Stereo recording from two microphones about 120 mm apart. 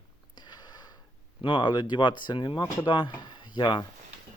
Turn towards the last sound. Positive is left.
turn(degrees=40)  # may be behind; listen again after turning